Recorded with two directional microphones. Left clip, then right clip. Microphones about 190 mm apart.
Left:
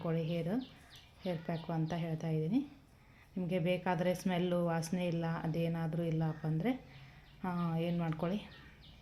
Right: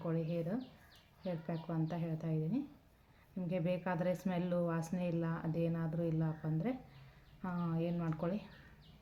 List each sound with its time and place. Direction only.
0.0 s speech: 30° left (ahead or behind)